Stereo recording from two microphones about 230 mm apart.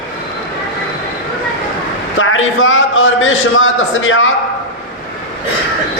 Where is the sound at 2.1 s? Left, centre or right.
Left.